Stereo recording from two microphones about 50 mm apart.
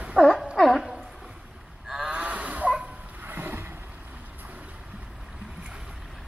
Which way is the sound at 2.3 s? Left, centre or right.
Right.